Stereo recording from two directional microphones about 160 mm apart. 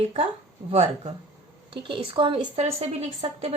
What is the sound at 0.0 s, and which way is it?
Speech, 40° right (ahead or behind).